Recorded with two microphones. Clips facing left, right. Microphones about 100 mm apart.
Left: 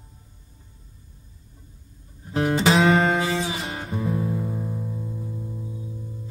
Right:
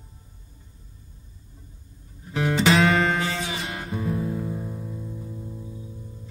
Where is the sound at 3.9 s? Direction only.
Centre (ahead or behind).